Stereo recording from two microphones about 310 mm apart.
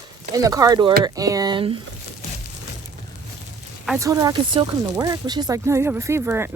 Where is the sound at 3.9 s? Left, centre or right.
Centre.